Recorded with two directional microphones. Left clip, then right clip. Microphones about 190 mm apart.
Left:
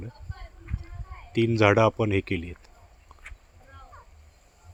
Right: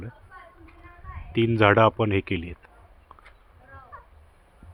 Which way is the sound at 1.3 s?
10° left (ahead or behind).